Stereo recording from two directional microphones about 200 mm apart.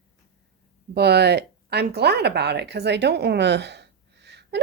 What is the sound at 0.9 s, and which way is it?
Speech, 55° right (ahead or behind).